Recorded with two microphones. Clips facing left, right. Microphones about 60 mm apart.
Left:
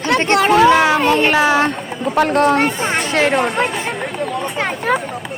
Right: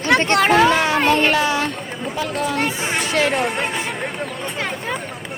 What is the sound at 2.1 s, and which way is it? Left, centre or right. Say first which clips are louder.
Speech: left 10 dB; left.